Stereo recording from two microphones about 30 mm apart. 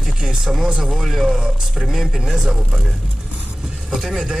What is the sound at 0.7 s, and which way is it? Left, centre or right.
Speech, right.